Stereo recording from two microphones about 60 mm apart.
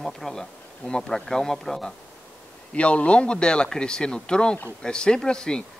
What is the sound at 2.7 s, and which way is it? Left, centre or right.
A man's voice, left.